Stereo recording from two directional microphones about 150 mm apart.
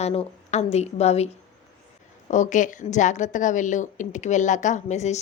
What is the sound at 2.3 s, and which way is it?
A woman's voice, 55° left (ahead or behind).